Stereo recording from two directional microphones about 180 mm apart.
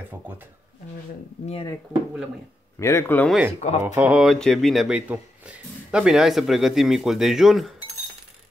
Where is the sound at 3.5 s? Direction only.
40° left (ahead or behind).